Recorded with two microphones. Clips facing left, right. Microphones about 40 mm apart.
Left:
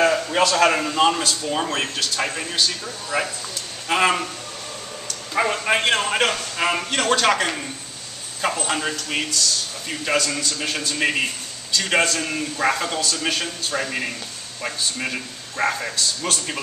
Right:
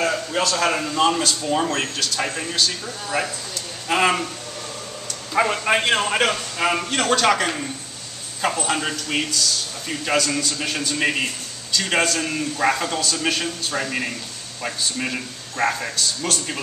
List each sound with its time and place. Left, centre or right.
0.0 s a sound: left
0.7 s a man's voice: centre
5.3 s a man's voice: centre